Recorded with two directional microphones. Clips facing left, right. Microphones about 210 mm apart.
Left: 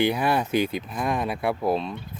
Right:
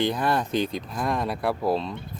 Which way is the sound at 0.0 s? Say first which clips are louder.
Left 2 dB; 10° left (ahead or behind).